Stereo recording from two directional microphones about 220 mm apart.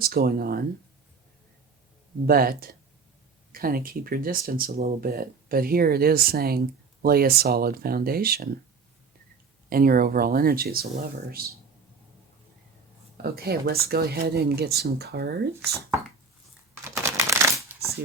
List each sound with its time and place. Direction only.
0.0 s speech: 45° right (ahead or behind)
2.2 s speech: 40° right (ahead or behind)
9.6 s speech: 40° right (ahead or behind)
13.2 s speech: 45° right (ahead or behind)
16.9 s a sound: 15° right (ahead or behind)